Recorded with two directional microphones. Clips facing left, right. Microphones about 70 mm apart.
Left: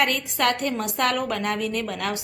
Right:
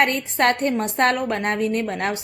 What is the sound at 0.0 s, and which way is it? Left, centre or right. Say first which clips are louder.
A woman's voice: right 3 dB; right.